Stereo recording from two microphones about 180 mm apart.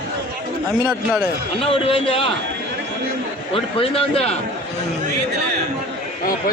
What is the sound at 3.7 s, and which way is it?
Speech, 30° left (ahead or behind).